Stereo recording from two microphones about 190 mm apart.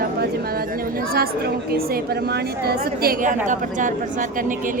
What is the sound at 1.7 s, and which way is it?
A woman's voice, 50° right (ahead or behind).